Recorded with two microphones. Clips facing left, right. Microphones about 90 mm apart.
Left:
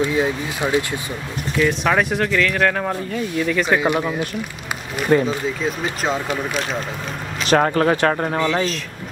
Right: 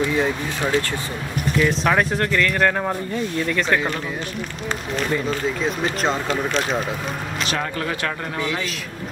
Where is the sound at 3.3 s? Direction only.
5° left (ahead or behind).